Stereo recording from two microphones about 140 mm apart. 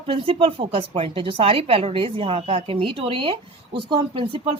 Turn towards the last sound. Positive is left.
turn(degrees=-35)  # may be behind; listen again after turning